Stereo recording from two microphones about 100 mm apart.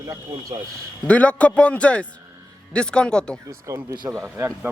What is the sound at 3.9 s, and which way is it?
Speech, 45° right (ahead or behind).